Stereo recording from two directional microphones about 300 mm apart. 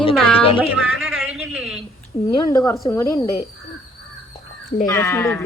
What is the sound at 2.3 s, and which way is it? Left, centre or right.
Speech, centre.